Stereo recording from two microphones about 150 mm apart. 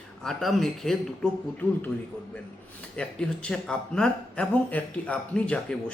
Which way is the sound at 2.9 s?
5° left (ahead or behind).